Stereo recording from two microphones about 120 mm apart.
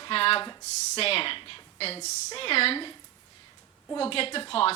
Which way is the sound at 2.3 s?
55° left (ahead or behind).